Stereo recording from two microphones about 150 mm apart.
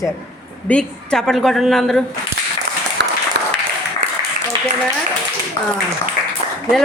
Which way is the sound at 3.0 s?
90° right.